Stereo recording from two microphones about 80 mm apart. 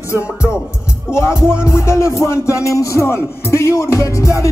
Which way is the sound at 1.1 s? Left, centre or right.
Left.